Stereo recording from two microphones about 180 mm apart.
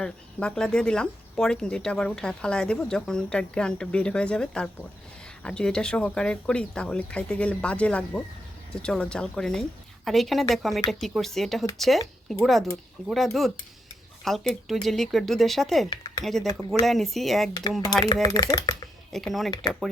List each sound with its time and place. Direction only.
0.0 s speech: 5° left (ahead or behind)
17.5 s speech: 20° left (ahead or behind)
19.1 s speech: centre (ahead or behind)